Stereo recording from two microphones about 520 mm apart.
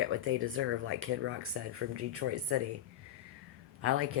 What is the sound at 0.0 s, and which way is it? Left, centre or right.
Speech, right.